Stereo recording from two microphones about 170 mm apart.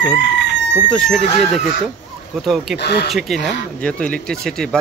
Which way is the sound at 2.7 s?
70° left (ahead or behind).